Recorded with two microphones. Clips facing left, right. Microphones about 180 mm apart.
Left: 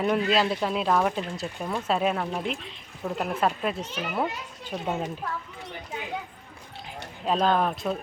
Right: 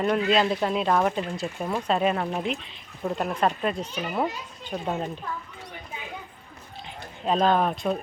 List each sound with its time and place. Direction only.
0.0 s speech: centre (ahead or behind)
3.2 s speech: 5° left (ahead or behind)
7.3 s speech: centre (ahead or behind)